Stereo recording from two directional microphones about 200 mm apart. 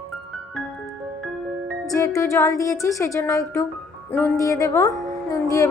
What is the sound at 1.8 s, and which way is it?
A woman's voice, 15° left (ahead or behind).